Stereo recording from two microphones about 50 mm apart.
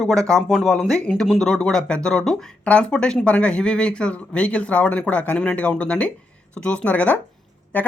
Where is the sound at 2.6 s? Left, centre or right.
Left.